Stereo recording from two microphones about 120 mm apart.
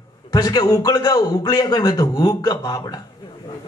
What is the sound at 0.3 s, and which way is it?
A man's voice, 35° left (ahead or behind).